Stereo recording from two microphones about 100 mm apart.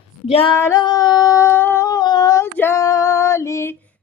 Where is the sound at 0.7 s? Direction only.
40° left (ahead or behind); by 1.8 s 20° left (ahead or behind).